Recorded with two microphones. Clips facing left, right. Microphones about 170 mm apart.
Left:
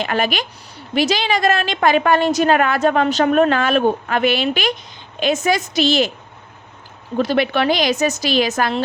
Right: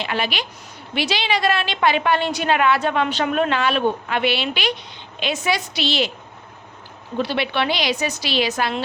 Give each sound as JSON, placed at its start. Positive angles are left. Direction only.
{"t": 0.0, "sound": "a woman's voice", "side_deg": 45}
{"t": 7.2, "sound": "a woman's voice", "side_deg": 45}